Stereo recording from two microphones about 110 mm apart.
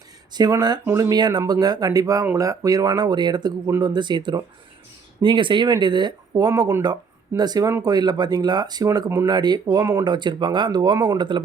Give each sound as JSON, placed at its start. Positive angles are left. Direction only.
{"t": 0.3, "sound": "speech", "side_deg": -40}
{"t": 0.9, "sound": "speech", "side_deg": -25}
{"t": 1.1, "sound": "speech", "side_deg": -40}
{"t": 9.3, "sound": "speech", "side_deg": -40}
{"t": 9.6, "sound": "speech", "side_deg": -25}
{"t": 10.1, "sound": "speech", "side_deg": -40}